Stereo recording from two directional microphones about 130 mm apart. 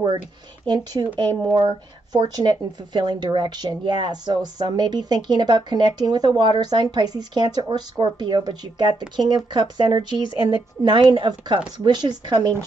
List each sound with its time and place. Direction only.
1.4 s speech: 35° right (ahead or behind)